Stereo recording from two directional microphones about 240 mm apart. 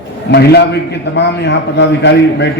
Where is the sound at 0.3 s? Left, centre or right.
Left.